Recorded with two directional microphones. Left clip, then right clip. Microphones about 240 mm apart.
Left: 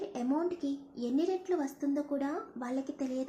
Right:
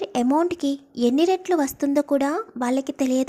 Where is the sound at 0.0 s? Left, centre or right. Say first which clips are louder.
Right 12 dB; right.